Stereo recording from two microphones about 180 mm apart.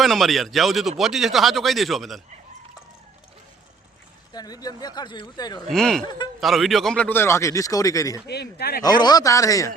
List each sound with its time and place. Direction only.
0.0 s speech: centre (ahead or behind)
4.3 s speech: 20° left (ahead or behind)
5.7 s a man's voice: 5° left (ahead or behind); by 8.2 s 20° left (ahead or behind)
8.3 s speech: 65° left (ahead or behind)
8.8 s speech: 25° left (ahead or behind)